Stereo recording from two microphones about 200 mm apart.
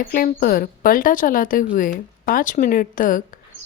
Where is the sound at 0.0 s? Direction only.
45° left (ahead or behind).